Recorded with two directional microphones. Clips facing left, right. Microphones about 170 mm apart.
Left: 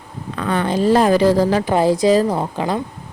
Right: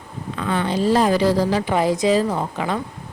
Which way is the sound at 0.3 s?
55° left (ahead or behind).